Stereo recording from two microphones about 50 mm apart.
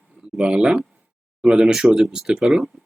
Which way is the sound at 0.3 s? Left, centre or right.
Centre.